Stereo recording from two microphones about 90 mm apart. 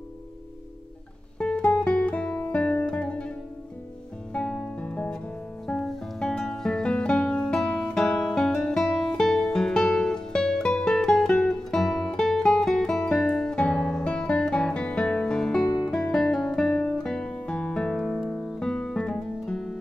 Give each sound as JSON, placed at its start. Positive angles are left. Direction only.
{"t": 1.4, "sound": "music", "side_deg": 10}
{"t": 1.7, "sound": "guitar", "side_deg": 15}
{"t": 4.3, "sound": "music", "side_deg": 10}
{"t": 15.6, "sound": "guitar", "side_deg": 40}
{"t": 15.9, "sound": "guitar", "side_deg": 10}
{"t": 16.7, "sound": "music", "side_deg": 10}